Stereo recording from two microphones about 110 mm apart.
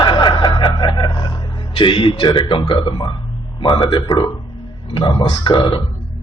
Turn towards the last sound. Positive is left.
turn(degrees=45)  # may be behind; listen again after turning